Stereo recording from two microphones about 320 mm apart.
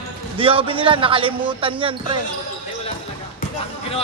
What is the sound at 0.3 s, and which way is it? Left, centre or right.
Speech, centre.